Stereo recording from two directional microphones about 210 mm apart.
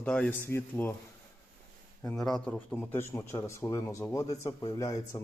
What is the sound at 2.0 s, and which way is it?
Speech, centre (ahead or behind).